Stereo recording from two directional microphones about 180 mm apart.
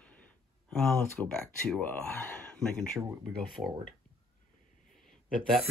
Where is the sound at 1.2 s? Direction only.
10° right (ahead or behind).